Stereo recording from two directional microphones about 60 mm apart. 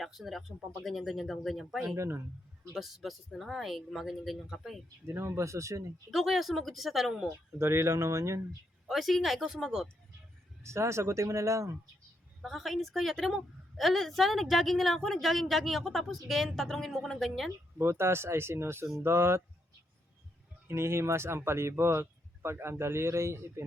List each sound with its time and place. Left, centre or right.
0.0 s speech: centre
2.0 s speech: right
2.7 s speech: centre
5.0 s speech: right
6.1 s speech: centre
7.6 s speech: right
8.9 s speech: centre
10.6 s speech: right
12.4 s speech: centre
17.7 s speech: right
20.7 s speech: right